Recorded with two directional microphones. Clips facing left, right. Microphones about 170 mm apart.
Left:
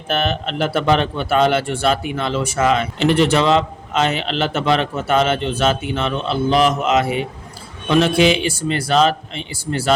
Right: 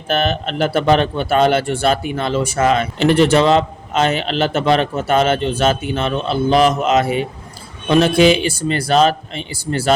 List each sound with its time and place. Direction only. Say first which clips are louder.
0.1 s speech: right 2 dB; 40° right (ahead or behind)